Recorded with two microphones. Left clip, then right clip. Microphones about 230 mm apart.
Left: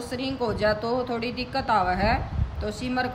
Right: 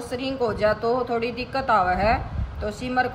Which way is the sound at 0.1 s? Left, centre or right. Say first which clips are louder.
Right 3 dB; centre.